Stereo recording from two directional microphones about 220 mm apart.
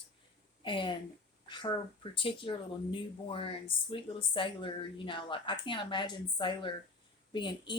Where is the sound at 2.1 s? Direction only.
25° left (ahead or behind).